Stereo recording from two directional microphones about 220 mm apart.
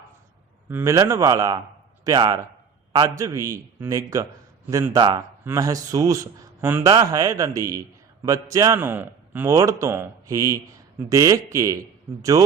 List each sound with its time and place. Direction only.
0.7 s speech: 10° right (ahead or behind)